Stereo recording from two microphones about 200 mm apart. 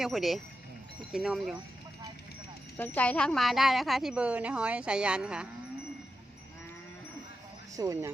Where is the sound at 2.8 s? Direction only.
10° left (ahead or behind).